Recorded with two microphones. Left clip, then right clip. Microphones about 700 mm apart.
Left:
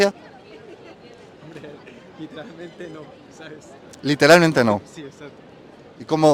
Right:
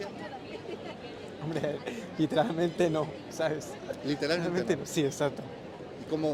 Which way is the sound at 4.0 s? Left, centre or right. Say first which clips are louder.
Left 18 dB; left.